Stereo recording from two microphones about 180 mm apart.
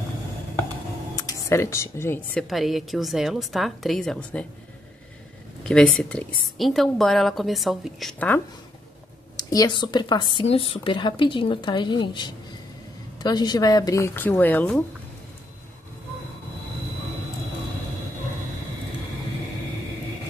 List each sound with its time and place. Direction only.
1.1 s speech: 15° left (ahead or behind)
2.5 s a woman's voice: centre (ahead or behind)
5.6 s a woman's voice: 5° left (ahead or behind)
9.4 s speech: 20° left (ahead or behind)